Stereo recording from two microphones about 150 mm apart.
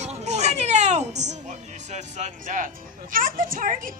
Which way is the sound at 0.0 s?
50° right (ahead or behind).